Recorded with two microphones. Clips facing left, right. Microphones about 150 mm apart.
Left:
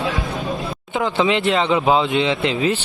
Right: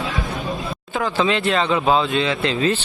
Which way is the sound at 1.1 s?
20° left (ahead or behind).